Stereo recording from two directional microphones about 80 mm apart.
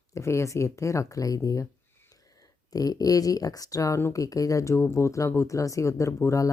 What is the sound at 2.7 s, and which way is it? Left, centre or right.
Speech, left.